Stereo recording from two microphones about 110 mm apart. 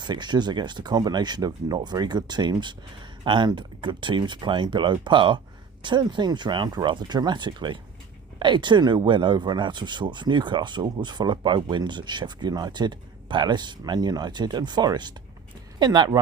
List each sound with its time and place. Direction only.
0.0 s speech: 40° right (ahead or behind)